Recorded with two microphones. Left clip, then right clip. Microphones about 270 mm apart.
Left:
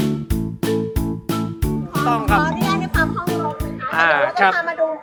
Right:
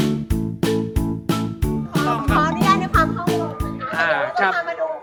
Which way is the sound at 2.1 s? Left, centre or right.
Centre.